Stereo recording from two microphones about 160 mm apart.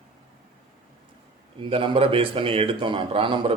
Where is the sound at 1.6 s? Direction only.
35° right (ahead or behind).